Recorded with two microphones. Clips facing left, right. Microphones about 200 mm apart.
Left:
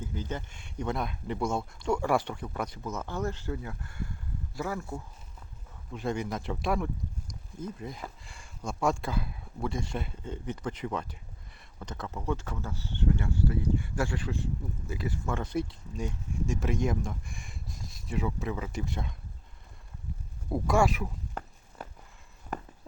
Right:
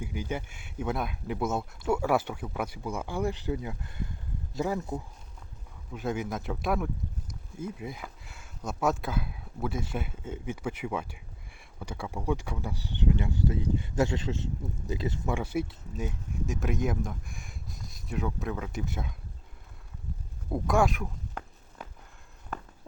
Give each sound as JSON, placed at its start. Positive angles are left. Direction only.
{"t": 0.0, "sound": "speech", "side_deg": -10}
{"t": 5.9, "sound": "speech", "side_deg": 0}
{"t": 15.4, "sound": "speech", "side_deg": -5}
{"t": 20.5, "sound": "speech", "side_deg": 0}